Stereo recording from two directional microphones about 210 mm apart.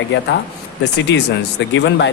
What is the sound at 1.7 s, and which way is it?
Speech, 55° left (ahead or behind).